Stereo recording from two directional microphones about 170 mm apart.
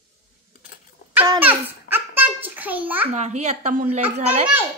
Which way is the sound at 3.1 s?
40° right (ahead or behind).